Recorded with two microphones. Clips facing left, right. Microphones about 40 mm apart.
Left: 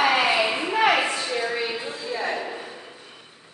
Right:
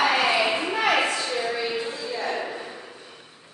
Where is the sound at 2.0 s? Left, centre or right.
Centre.